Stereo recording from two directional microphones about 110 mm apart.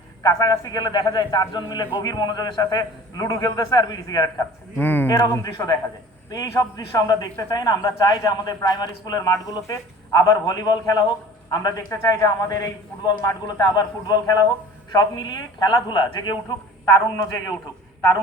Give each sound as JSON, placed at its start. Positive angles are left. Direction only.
{"t": 0.2, "sound": "a man's voice", "side_deg": 35}
{"t": 4.8, "sound": "speech", "side_deg": 15}
{"t": 5.2, "sound": "a man's voice", "side_deg": 35}